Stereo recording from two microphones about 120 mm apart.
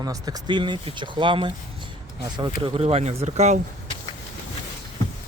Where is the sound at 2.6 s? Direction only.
50° right (ahead or behind).